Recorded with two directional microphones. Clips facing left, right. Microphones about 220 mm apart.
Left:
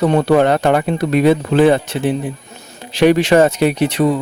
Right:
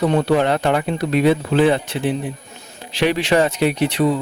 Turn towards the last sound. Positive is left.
turn(degrees=45)  # may be behind; listen again after turning